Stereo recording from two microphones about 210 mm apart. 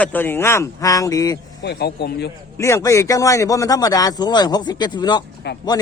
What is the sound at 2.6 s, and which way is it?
A man's voice, 15° left (ahead or behind).